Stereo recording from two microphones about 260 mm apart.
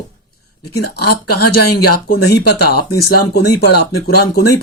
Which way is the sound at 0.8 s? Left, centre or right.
Left.